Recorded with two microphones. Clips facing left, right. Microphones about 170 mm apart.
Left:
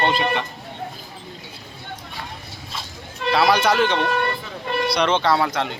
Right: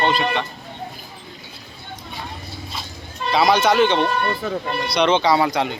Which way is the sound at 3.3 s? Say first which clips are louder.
Right 2 dB; 5° left (ahead or behind).